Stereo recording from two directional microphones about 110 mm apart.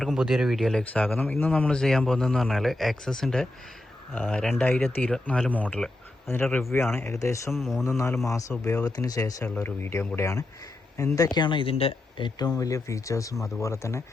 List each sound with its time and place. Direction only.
0.0 s speech: centre (ahead or behind); by 1.5 s 15° left (ahead or behind)
1.5 s speech: 5° left (ahead or behind); by 7.5 s 30° left (ahead or behind)
7.5 s speech: centre (ahead or behind)
7.9 s speech: 25° left (ahead or behind)
9.6 s speech: 20° left (ahead or behind)